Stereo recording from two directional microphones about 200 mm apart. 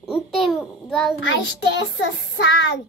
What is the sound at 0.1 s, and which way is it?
Babbling, centre (ahead or behind).